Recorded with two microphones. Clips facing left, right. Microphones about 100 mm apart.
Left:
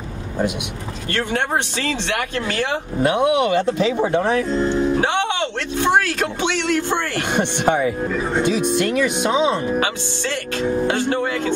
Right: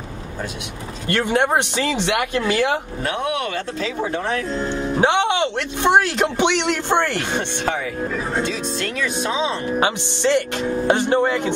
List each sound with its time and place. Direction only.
1.1 s speech: 15° right (ahead or behind)
3.0 s speech: 15° left (ahead or behind)
5.0 s speech: 20° right (ahead or behind)
7.2 s speech: 15° left (ahead or behind)
9.8 s speech: 20° right (ahead or behind)